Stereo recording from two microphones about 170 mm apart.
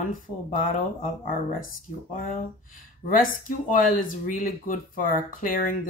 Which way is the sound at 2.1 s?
55° left (ahead or behind).